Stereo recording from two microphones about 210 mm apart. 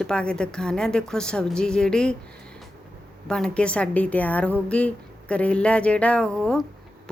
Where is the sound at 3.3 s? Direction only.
5° left (ahead or behind).